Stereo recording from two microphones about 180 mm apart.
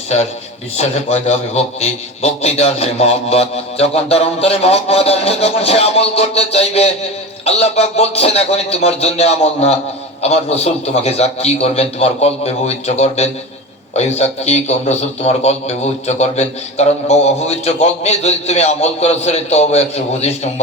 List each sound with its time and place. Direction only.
0.8 s a man's voice: 40° left (ahead or behind)